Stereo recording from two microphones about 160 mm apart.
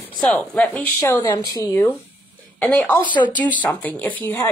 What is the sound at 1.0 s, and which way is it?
Speech, 20° left (ahead or behind).